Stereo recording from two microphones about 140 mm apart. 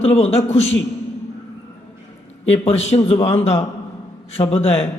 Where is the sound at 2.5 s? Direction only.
45° left (ahead or behind).